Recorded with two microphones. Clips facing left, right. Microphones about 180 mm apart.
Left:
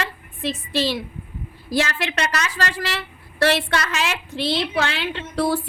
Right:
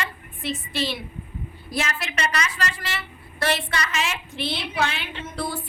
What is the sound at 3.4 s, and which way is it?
A woman's voice, 90° left.